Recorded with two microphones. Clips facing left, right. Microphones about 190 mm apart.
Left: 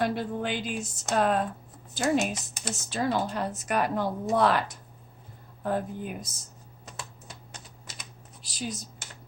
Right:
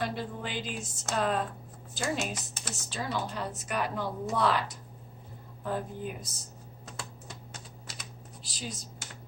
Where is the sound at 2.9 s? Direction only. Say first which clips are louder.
Left 6 dB; 55° left (ahead or behind).